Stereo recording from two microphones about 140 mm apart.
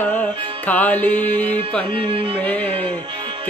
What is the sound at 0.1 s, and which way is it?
Music, 10° left (ahead or behind).